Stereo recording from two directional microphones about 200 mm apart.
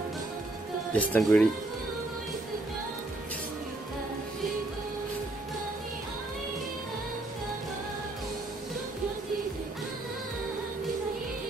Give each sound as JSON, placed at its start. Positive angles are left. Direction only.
{"t": 0.9, "sound": "speech", "side_deg": 5}